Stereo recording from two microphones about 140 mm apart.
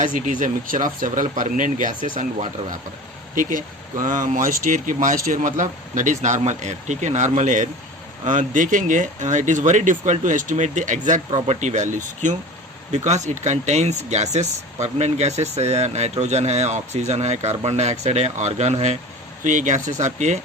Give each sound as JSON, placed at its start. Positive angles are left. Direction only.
{"t": 0.0, "sound": "speech", "side_deg": -70}